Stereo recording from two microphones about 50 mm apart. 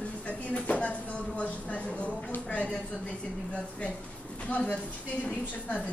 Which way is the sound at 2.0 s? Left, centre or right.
Left.